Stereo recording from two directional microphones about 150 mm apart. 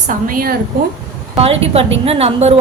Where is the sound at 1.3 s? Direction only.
40° right (ahead or behind).